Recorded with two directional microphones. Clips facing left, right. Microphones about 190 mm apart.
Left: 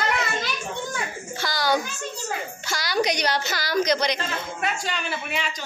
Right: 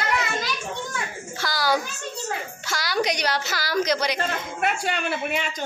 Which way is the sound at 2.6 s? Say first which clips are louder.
Left 1 dB; centre (ahead or behind).